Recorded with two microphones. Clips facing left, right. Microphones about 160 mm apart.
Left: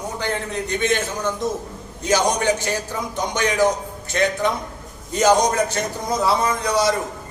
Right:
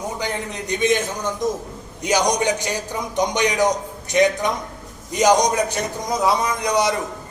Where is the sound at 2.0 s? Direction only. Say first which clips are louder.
Even; 15° right (ahead or behind).